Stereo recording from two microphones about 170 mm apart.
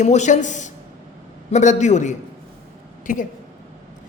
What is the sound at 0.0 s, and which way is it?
Speech, 45° left (ahead or behind).